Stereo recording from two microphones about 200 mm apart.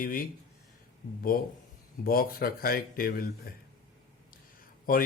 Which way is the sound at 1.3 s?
45° left (ahead or behind).